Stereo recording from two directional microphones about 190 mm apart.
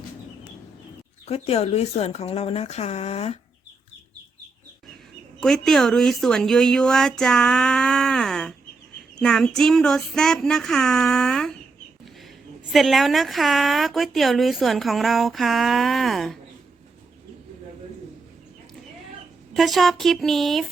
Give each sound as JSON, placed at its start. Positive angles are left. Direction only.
{"t": 1.3, "sound": "speech", "side_deg": 35}
{"t": 5.4, "sound": "a woman's voice", "side_deg": 0}
{"t": 12.7, "sound": "a woman's voice", "side_deg": 0}
{"t": 19.5, "sound": "a woman's voice", "side_deg": 0}